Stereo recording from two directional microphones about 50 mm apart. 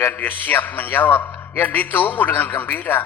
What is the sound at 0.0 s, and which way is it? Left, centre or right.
A man's voice, left.